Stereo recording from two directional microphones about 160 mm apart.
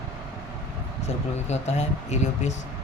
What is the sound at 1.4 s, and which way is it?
Speech, 45° left (ahead or behind).